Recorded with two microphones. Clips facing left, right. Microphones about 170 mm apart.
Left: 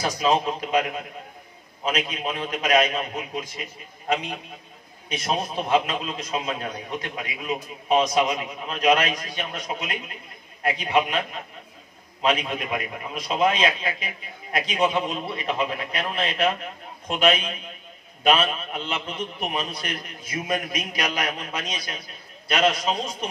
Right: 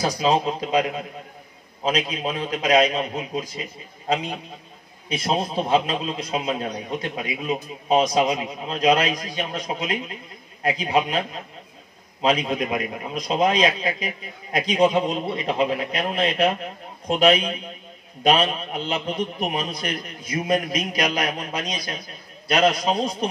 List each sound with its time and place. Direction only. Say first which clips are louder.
0.0 s a man's voice: right 2 dB; 35° right (ahead or behind)